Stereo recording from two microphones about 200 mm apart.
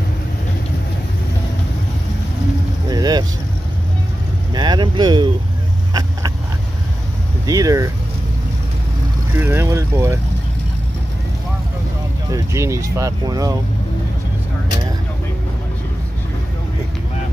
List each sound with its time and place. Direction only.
2.9 s vehicle: 20° right (ahead or behind)
4.6 s boat: 20° right (ahead or behind)
7.4 s vehicle: 15° right (ahead or behind)
9.3 s vehicle: 10° right (ahead or behind)
12.3 s a sound: 15° right (ahead or behind)